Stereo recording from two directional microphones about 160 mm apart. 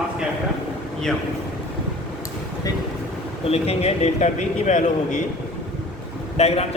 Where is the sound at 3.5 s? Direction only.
40° left (ahead or behind).